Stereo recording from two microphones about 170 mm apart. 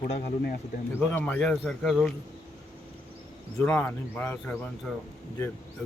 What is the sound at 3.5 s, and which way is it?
Speech, 10° left (ahead or behind).